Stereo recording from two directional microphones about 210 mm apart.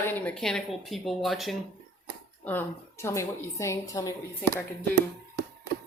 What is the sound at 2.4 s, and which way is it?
Speech, 10° left (ahead or behind).